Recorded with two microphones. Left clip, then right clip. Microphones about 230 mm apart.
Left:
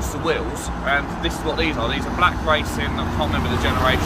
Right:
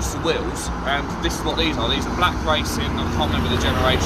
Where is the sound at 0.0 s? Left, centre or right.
Left.